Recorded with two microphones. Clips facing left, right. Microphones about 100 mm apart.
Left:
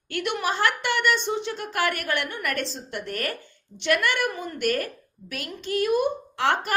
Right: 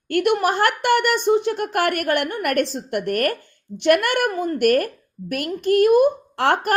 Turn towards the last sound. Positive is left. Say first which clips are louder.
# right 5 dB
turn(degrees=-50)  # may be behind; listen again after turning